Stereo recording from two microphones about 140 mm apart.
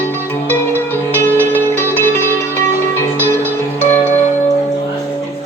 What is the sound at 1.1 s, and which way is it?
Music, 15° left (ahead or behind).